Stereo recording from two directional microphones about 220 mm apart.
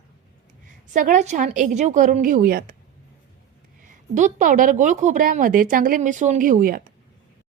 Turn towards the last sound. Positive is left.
turn(degrees=-40)  # may be behind; listen again after turning